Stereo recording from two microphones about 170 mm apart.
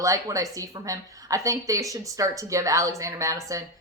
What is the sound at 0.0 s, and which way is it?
A woman's voice, 20° right (ahead or behind).